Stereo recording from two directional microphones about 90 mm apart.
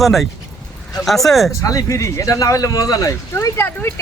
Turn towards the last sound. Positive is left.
turn(degrees=30)  # may be behind; listen again after turning